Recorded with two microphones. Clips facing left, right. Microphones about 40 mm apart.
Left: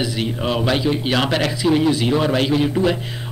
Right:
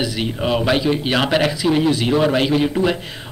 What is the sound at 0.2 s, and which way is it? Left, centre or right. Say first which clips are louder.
A man's voice: right 3 dB; centre.